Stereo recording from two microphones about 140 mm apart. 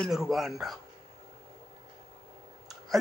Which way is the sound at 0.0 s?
Centre (ahead or behind).